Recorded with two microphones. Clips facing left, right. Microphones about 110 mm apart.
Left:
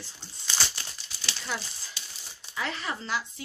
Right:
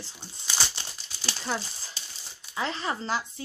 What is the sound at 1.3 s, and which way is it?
Speech, 35° right (ahead or behind).